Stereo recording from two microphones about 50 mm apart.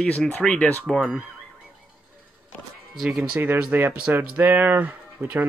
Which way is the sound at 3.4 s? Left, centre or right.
Right.